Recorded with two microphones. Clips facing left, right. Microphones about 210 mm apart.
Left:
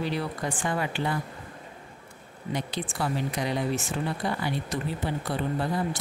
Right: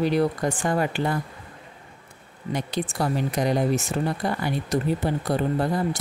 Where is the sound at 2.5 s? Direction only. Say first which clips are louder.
Right 4 dB; 40° right (ahead or behind).